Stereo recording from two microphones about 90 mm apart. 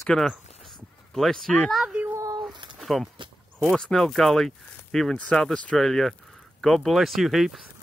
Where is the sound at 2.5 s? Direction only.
60° right (ahead or behind).